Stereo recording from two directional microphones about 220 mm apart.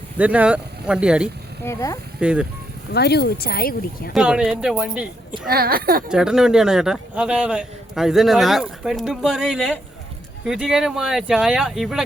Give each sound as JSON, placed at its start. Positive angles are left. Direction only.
{"t": 0.2, "sound": "speech", "side_deg": -5}
{"t": 1.6, "sound": "speech", "side_deg": 15}
{"t": 2.2, "sound": "speech", "side_deg": -5}
{"t": 2.9, "sound": "speech", "side_deg": 45}
{"t": 4.1, "sound": "speech", "side_deg": -5}
{"t": 5.5, "sound": "speech", "side_deg": -45}
{"t": 6.1, "sound": "speech", "side_deg": -5}